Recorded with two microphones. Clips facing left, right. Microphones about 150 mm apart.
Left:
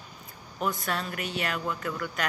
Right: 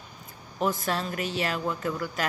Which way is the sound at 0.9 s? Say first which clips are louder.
Right 3 dB; 35° right (ahead or behind).